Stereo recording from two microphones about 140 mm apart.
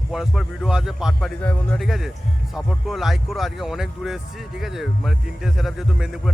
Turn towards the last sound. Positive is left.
turn(degrees=0)  # may be behind; listen again after turning